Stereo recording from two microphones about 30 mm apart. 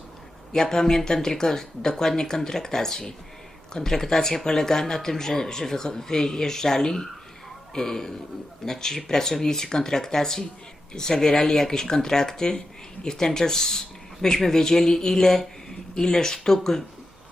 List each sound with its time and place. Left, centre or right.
0.5 s speech: centre